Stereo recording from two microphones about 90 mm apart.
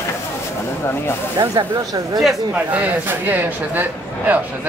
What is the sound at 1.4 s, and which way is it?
Speech, 50° right (ahead or behind).